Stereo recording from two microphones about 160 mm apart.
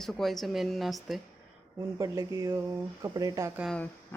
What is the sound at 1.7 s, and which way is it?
Speech, 20° right (ahead or behind).